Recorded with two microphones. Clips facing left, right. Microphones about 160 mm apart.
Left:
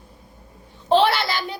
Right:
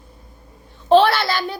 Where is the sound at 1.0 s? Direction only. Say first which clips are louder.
Right 2 dB; 15° left (ahead or behind).